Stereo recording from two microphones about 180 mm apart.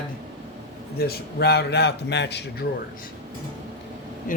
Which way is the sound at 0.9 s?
60° left (ahead or behind).